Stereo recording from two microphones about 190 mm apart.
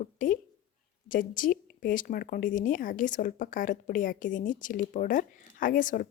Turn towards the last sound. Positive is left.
turn(degrees=45)  # may be behind; listen again after turning